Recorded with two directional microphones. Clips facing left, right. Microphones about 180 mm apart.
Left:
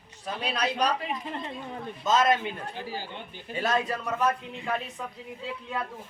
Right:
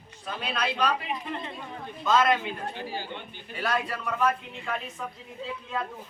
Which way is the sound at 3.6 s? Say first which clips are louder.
Left 1 dB; 20° left (ahead or behind).